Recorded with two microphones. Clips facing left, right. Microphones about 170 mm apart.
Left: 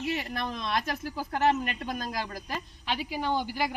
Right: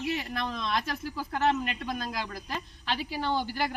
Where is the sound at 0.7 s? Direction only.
50° left (ahead or behind).